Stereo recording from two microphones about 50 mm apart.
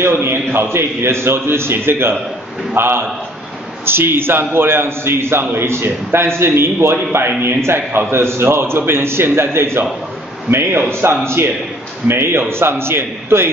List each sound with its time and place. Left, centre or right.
0.2 s a man's voice: right
10.9 s a man's voice: right